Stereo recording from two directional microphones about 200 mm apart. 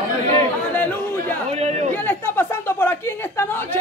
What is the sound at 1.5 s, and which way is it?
Speech, 30° right (ahead or behind).